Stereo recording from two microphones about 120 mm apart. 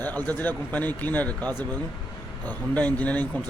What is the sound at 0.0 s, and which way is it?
Speech, 15° left (ahead or behind).